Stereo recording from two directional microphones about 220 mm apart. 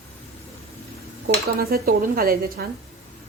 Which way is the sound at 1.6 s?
40° right (ahead or behind).